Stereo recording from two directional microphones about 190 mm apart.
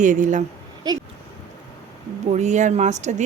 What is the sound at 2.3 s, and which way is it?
Speech, 40° right (ahead or behind).